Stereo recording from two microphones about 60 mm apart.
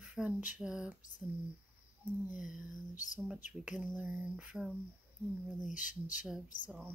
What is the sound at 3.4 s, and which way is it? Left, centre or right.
A woman's voice, right.